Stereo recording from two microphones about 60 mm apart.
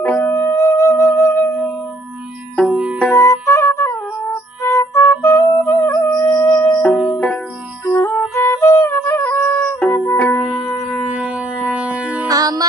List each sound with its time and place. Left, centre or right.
0.0 s music: left
0.3 s music: left
2.6 s music: centre
3.1 s music: left
7.9 s music: left
10.4 s music: centre
11.1 s music: centre
12.3 s music: right